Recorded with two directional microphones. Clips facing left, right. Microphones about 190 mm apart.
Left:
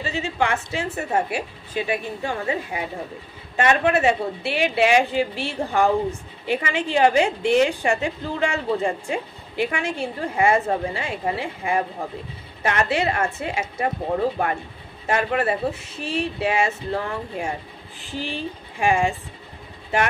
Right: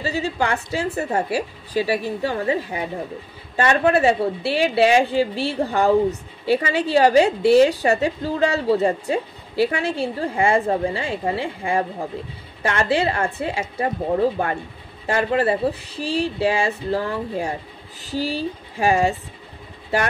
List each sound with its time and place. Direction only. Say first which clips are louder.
0.0 s a woman's voice: right 1 dB; 35° right (ahead or behind)
15.0 s a woman's voice: right 2 dB; 30° right (ahead or behind)